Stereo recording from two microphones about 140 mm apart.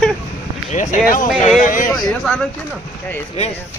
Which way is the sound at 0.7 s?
70° left (ahead or behind).